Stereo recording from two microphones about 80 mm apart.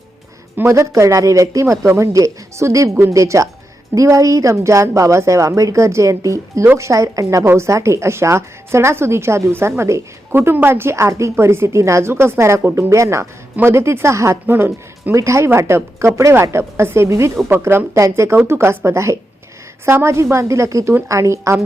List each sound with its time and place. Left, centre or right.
0.5 s speech: right
0.8 s a woman's voice: right
14.4 s speech: right
15.1 s a woman's voice: right